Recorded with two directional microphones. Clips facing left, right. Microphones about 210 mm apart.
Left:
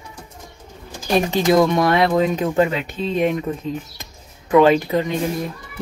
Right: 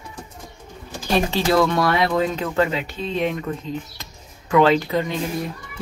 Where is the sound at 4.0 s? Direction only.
20° left (ahead or behind).